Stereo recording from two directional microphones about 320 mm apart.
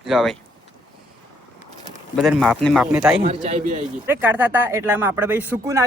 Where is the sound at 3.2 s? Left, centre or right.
Centre.